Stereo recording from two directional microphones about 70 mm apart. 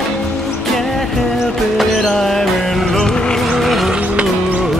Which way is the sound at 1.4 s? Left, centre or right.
Centre.